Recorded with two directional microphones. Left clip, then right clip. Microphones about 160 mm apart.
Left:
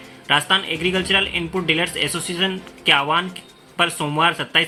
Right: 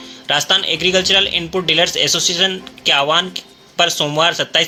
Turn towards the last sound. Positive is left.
turn(degrees=-30)  # may be behind; listen again after turning